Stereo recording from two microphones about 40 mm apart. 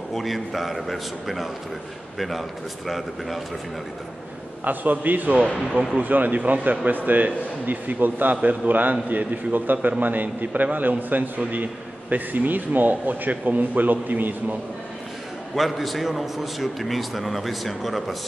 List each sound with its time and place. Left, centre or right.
0.1 s a man's voice: centre
4.6 s a man's voice: right
15.5 s a man's voice: centre